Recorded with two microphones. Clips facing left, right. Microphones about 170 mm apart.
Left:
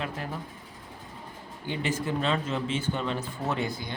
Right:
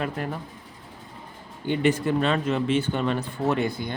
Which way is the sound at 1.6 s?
60° right (ahead or behind).